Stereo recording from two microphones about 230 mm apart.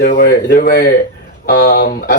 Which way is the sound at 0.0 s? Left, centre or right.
Left.